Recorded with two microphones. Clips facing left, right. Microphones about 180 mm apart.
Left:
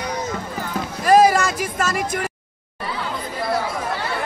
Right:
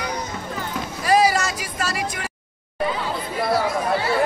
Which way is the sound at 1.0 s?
50° left (ahead or behind).